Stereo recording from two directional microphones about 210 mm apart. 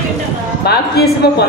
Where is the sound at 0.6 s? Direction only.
50° left (ahead or behind).